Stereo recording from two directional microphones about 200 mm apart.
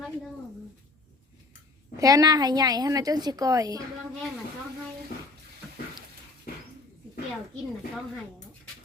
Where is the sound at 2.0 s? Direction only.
15° right (ahead or behind).